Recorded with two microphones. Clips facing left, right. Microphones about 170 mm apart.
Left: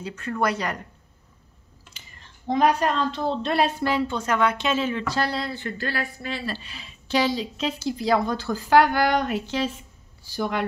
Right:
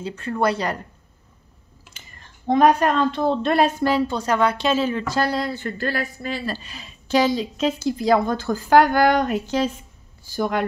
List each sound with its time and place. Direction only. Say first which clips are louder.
0.0 s speech: right 3 dB; 30° right (ahead or behind)
2.0 s speech: right 3 dB; 50° right (ahead or behind)